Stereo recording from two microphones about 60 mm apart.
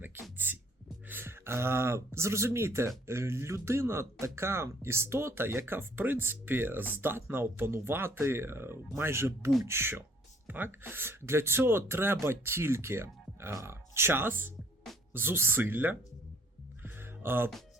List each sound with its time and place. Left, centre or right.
0.0 s music: right
1.0 s speech: right
10.4 s speech: right
16.8 s music: right